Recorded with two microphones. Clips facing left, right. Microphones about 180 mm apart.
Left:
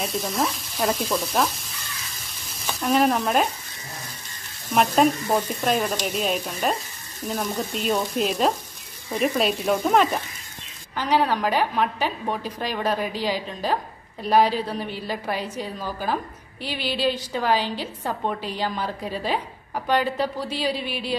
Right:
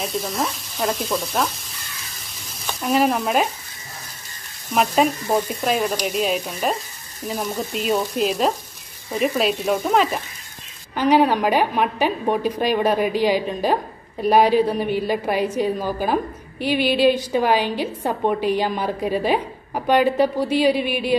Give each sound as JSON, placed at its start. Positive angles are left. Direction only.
{"t": 0.0, "sound": "frying", "side_deg": 0}
{"t": 2.6, "sound": "frying", "side_deg": -5}
{"t": 4.7, "sound": "frying", "side_deg": 0}
{"t": 11.0, "sound": "a woman's voice", "side_deg": -15}